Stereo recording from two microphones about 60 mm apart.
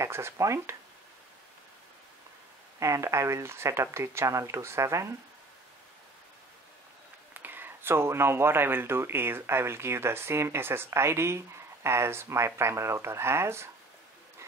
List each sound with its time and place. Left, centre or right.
0.0 s speech: right
2.8 s speech: right
7.3 s speech: right